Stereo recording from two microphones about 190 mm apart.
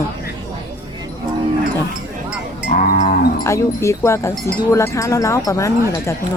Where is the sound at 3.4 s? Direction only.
15° left (ahead or behind).